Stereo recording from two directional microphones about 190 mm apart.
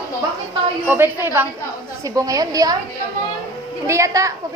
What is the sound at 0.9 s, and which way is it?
A woman's voice, 10° right (ahead or behind).